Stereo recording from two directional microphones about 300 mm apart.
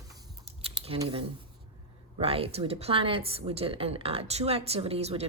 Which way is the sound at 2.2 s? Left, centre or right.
Centre.